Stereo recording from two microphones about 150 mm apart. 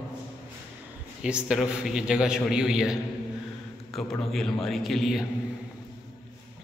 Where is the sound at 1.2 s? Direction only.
5° right (ahead or behind).